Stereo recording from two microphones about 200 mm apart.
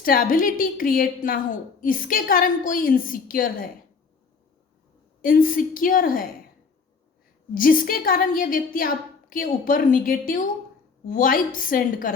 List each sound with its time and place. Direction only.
0.0 s a woman's voice: 45° left (ahead or behind)
5.2 s a woman's voice: 45° left (ahead or behind)
7.5 s a woman's voice: 45° left (ahead or behind)